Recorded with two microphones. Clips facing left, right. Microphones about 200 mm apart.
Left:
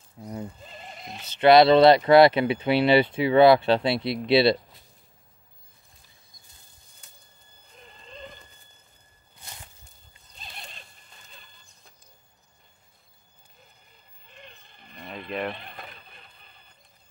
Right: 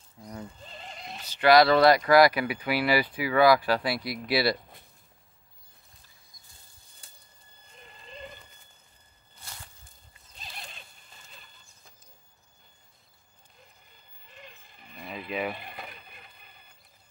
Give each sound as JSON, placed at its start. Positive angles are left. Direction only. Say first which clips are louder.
{"t": 0.2, "sound": "speech", "louder": "left 5 dB", "side_deg": 25}
{"t": 0.7, "sound": "sheep", "louder": "left 1 dB", "side_deg": 5}
{"t": 1.2, "sound": "speech", "louder": "left 4 dB", "side_deg": 25}
{"t": 7.0, "sound": "bird", "louder": "left 1 dB", "side_deg": -30}
{"t": 7.7, "sound": "horse", "louder": "left 1 dB", "side_deg": -5}
{"t": 10.3, "sound": "neigh", "louder": "left 1 dB", "side_deg": 0}
{"t": 14.2, "sound": "a sound", "louder": "left 1 dB", "side_deg": 0}